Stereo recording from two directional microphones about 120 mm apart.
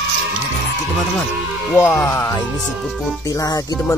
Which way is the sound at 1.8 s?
10° left (ahead or behind).